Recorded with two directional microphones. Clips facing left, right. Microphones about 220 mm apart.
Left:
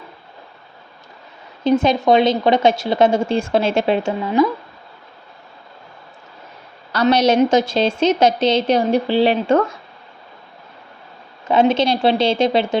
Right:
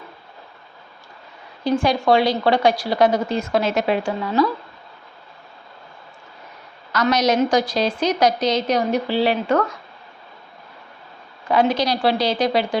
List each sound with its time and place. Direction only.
1.6 s a woman's voice: 20° left (ahead or behind)
6.9 s a woman's voice: 30° left (ahead or behind)
11.7 s a woman's voice: 25° left (ahead or behind)